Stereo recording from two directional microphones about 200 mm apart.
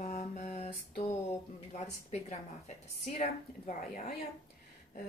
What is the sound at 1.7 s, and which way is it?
Speech, 35° left (ahead or behind).